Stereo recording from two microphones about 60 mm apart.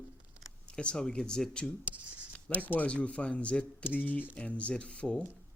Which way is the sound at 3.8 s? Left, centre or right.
Left.